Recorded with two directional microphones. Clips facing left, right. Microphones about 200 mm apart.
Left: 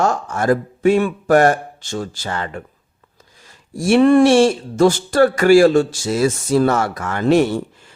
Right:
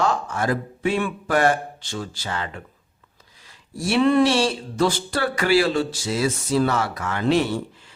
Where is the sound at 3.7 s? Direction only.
50° left (ahead or behind).